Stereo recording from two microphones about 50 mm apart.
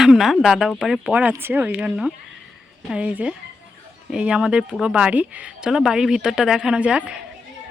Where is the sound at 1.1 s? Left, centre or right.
Right.